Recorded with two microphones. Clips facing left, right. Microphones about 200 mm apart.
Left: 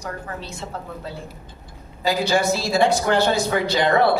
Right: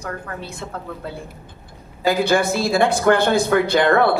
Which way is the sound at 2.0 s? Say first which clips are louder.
Right 3 dB; 55° right (ahead or behind).